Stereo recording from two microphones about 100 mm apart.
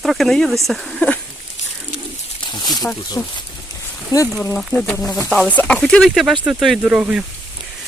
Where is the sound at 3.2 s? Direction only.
35° left (ahead or behind).